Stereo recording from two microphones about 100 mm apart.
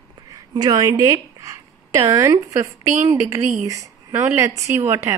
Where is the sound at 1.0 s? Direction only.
35° right (ahead or behind).